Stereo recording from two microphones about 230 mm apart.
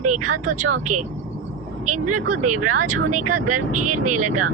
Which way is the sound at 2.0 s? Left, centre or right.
Right.